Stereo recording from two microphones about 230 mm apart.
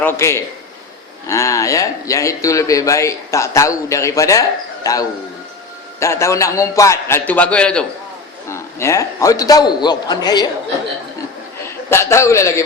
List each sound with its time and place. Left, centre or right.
0.0 s speech: centre
11.6 s a man's voice: centre